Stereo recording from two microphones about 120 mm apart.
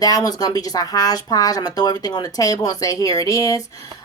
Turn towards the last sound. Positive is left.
turn(degrees=30)  # may be behind; listen again after turning